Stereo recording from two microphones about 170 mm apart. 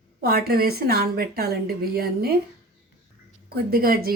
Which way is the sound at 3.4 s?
60° right (ahead or behind).